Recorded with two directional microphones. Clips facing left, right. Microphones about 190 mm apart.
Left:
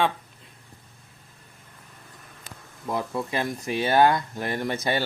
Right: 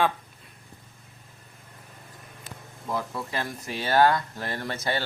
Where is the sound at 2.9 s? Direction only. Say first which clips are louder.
Left 3 dB; 20° left (ahead or behind).